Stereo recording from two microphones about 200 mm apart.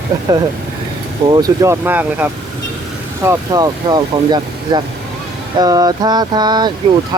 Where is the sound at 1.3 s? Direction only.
20° right (ahead or behind).